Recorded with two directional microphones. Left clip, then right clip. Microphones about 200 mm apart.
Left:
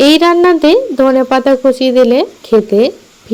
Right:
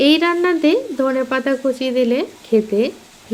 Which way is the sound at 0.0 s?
35° left (ahead or behind).